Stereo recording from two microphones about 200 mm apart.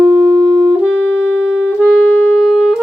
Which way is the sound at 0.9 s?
70° right (ahead or behind).